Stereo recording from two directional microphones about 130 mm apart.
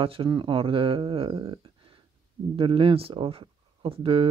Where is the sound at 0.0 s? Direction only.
45° right (ahead or behind).